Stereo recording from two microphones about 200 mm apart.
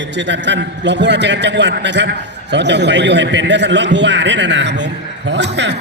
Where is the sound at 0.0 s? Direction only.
60° right (ahead or behind).